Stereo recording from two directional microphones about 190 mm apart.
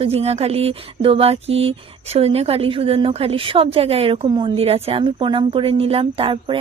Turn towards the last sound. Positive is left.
turn(degrees=-30)  # may be behind; listen again after turning